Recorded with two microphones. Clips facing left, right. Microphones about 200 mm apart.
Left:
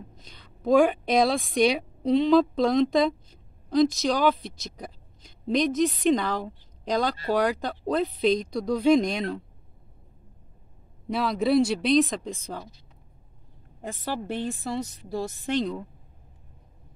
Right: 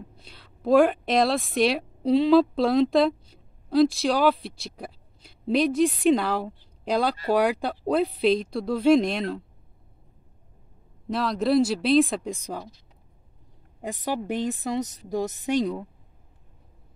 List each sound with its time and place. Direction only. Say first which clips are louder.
0.1 s a woman's voice: even; 5° right (ahead or behind)
11.1 s speech: even; centre (ahead or behind)
13.7 s speech: right 3 dB; 15° right (ahead or behind)